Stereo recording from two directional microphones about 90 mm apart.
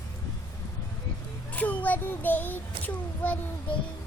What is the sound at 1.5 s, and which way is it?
A child's voice, 15° left (ahead or behind).